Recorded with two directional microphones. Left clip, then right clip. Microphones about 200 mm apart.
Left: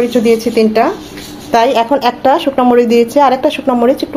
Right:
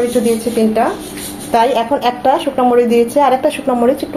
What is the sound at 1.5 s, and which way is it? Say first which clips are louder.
A woman's voice: left 3 dB; 30° left (ahead or behind).